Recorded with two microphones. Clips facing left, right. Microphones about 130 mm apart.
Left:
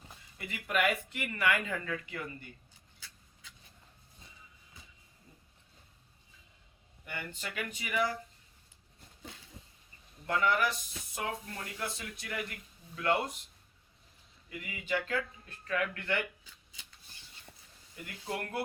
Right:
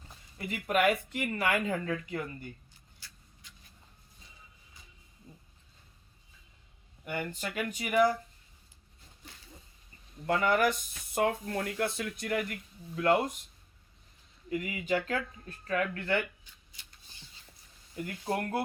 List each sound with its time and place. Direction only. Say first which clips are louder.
0.3 s speech: right 4 dB; 35° right (ahead or behind)
7.1 s speech: right 6 dB; 45° right (ahead or behind)
10.2 s speech: right 3 dB; 45° right (ahead or behind)
14.5 s speech: right 5 dB; 40° right (ahead or behind)
17.9 s speech: right 6 dB; 40° right (ahead or behind)